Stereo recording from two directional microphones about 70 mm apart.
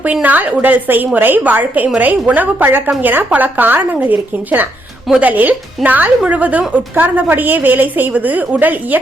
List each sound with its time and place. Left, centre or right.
0.0 s a woman's voice: right